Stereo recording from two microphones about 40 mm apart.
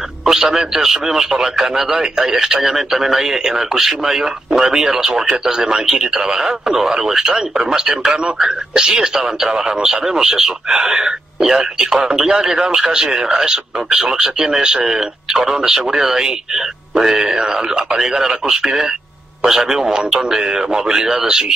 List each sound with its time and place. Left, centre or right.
0.2 s speech: centre